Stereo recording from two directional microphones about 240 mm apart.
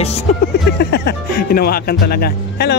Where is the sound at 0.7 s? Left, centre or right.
Left.